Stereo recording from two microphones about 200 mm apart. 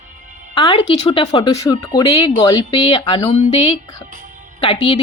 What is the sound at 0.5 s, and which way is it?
Speech, 25° left (ahead or behind).